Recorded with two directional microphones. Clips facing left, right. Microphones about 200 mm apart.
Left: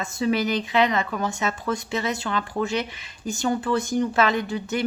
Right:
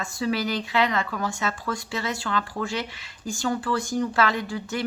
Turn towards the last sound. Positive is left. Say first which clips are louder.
# left 3 dB
turn(degrees=20)  # may be behind; listen again after turning